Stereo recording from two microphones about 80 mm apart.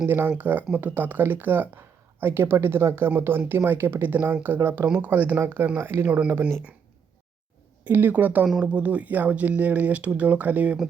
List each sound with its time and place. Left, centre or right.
0.0 s speech: right
7.9 s speech: right